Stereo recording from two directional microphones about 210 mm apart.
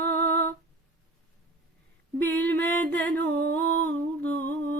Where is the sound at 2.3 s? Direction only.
10° left (ahead or behind).